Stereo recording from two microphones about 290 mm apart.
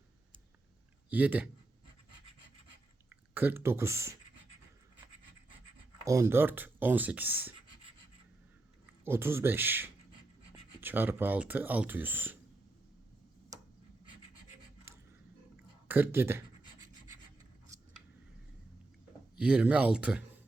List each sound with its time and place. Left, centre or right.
1.1 s speech: centre
3.3 s speech: centre
6.1 s speech: centre
9.0 s speech: centre
15.9 s speech: centre
17.7 s scissors: centre
19.4 s speech: centre